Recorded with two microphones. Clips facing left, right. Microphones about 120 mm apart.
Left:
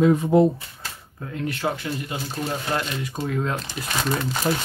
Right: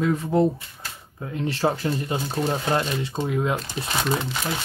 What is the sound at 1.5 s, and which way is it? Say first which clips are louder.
Speech: right 6 dB; 35° right (ahead or behind).